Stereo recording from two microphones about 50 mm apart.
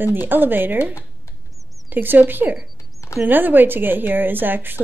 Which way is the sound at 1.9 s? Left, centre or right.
Right.